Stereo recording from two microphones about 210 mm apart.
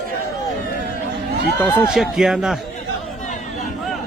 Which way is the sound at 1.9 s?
5° right (ahead or behind).